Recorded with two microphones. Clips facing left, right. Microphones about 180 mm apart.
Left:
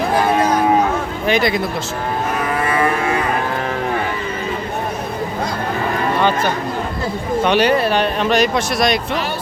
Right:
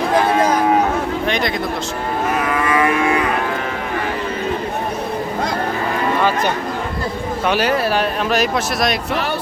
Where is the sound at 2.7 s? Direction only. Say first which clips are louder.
Right 2 dB; 35° left (ahead or behind).